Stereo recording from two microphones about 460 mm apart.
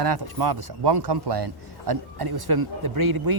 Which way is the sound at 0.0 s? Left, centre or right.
Right.